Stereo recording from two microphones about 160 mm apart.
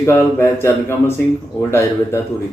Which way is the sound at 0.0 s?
15° left (ahead or behind).